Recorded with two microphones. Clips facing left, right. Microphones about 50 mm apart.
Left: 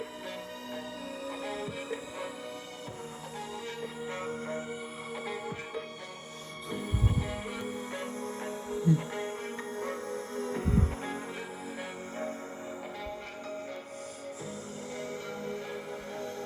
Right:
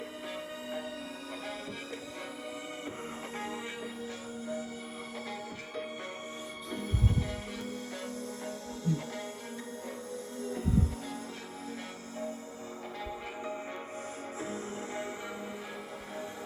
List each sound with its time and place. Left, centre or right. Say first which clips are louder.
8.4 s music: left 6 dB; left
10.5 s music: even; left